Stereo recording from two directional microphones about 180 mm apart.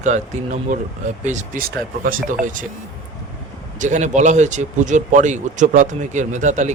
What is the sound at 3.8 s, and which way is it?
Speech, 40° right (ahead or behind).